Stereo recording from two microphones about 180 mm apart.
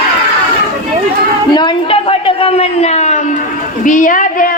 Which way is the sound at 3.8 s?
45° left (ahead or behind).